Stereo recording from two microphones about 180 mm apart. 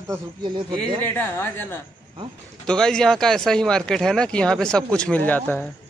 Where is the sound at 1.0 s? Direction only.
10° left (ahead or behind).